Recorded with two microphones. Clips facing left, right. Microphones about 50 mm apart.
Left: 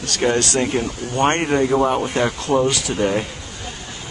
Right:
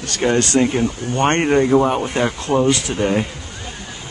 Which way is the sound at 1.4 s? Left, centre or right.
Centre.